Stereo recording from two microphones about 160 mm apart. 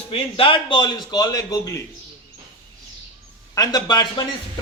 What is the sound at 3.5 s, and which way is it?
Speech, 25° left (ahead or behind).